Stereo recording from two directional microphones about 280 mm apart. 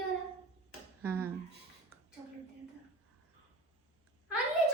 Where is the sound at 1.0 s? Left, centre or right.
Centre.